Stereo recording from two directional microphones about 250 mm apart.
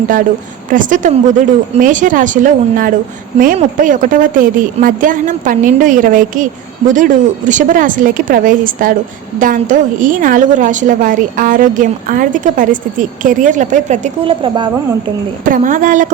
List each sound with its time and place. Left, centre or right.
0.7 s a woman's voice: right
15.4 s a woman's voice: right